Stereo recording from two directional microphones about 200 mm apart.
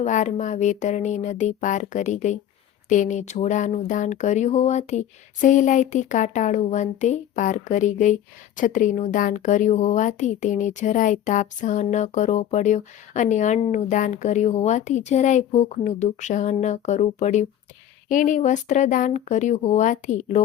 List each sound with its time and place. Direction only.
0.0 s a woman's voice: 40° left (ahead or behind)